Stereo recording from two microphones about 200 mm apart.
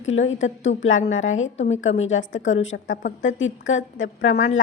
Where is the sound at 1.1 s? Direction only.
75° left (ahead or behind).